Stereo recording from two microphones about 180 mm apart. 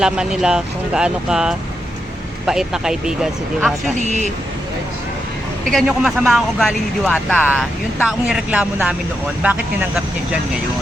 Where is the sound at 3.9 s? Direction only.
40° right (ahead or behind).